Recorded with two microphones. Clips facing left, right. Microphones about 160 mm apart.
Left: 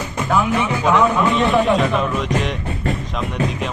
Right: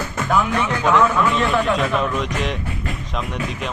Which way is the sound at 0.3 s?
10° left (ahead or behind).